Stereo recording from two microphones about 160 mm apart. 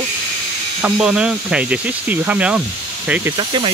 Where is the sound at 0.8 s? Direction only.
5° right (ahead or behind).